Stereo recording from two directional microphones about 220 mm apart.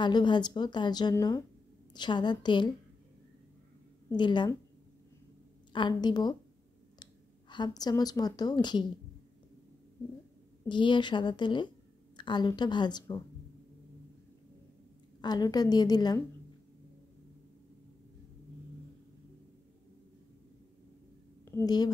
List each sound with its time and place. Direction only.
0.0 s a woman's voice: 20° left (ahead or behind)
4.2 s a woman's voice: 20° left (ahead or behind)
5.7 s a woman's voice: 20° left (ahead or behind)
10.7 s a woman's voice: 20° left (ahead or behind)
15.2 s a woman's voice: 20° left (ahead or behind)
21.5 s a woman's voice: 15° left (ahead or behind)